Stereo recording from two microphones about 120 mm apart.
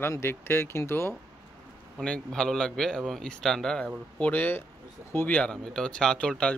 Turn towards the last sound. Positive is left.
turn(degrees=10)  # may be behind; listen again after turning